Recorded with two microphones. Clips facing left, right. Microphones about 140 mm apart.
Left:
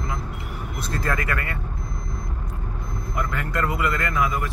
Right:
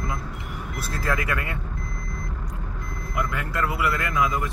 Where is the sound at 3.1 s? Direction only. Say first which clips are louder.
Left 1 dB; 10° right (ahead or behind).